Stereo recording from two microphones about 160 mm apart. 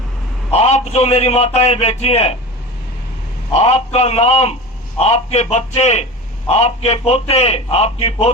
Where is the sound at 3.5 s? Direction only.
40° left (ahead or behind).